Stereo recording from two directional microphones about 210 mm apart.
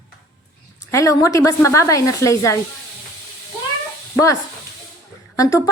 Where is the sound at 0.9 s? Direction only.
15° left (ahead or behind).